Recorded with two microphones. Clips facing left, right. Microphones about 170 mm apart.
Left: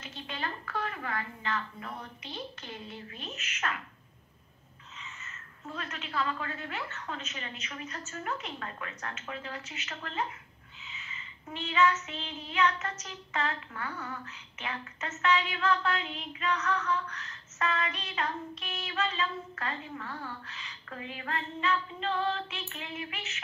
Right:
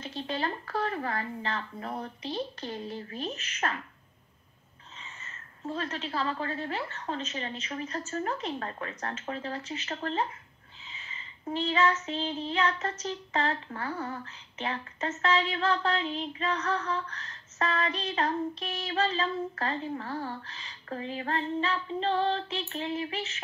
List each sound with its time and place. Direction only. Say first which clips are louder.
0.0 s speech: right 6 dB; 35° right (ahead or behind)
5.2 s speech: right 10 dB; 30° right (ahead or behind)
10.9 s child singing: even; 30° right (ahead or behind)
13.0 s speech: right 5 dB; 35° right (ahead or behind)